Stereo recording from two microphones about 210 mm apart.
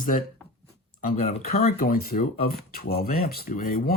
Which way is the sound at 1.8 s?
45° left (ahead or behind).